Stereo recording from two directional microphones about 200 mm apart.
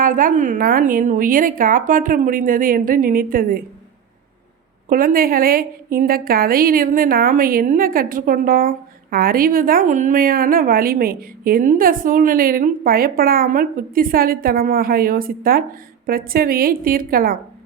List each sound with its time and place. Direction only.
0.0 s a woman's voice: 40° right (ahead or behind)
4.9 s a woman's voice: 45° right (ahead or behind)